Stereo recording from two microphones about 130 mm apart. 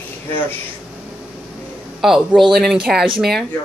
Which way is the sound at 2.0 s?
Centre (ahead or behind).